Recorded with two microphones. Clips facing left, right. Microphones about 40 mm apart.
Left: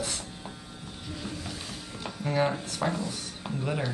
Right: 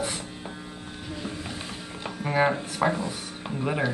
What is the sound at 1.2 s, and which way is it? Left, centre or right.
Music, right.